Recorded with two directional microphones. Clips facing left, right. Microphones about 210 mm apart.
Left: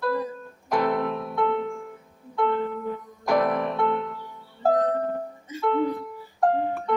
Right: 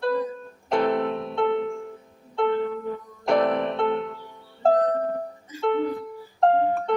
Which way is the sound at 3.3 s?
25° right (ahead or behind).